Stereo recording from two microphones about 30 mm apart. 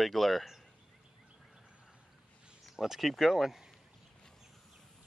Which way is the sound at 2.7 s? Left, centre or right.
Centre.